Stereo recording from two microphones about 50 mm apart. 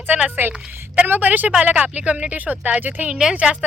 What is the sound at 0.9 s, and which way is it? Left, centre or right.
Speech, right.